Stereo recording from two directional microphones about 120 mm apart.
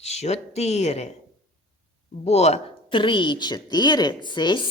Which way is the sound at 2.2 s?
65° left (ahead or behind).